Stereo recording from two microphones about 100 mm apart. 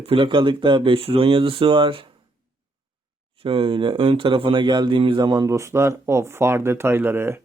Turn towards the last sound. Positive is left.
turn(degrees=-25)  # may be behind; listen again after turning